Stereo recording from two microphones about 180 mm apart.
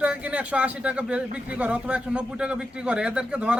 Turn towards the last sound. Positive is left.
turn(degrees=-5)  # may be behind; listen again after turning